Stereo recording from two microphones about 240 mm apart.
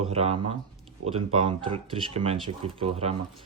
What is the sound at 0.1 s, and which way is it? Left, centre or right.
Speech, right.